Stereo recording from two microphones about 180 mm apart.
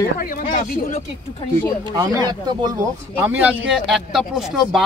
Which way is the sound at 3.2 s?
10° right (ahead or behind).